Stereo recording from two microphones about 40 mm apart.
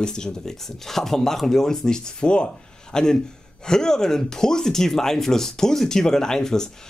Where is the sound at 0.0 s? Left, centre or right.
Centre.